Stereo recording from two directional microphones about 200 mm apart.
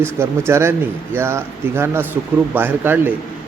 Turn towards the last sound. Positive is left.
turn(degrees=-10)  # may be behind; listen again after turning